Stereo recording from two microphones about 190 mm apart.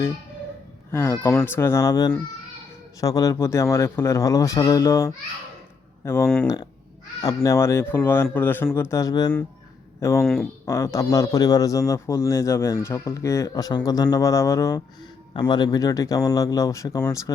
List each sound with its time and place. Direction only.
0.9 s a man's voice: 10° left (ahead or behind)
6.2 s a man's voice: 5° left (ahead or behind)